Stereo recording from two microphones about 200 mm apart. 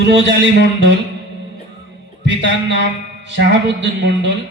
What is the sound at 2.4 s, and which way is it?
Music, 65° left (ahead or behind).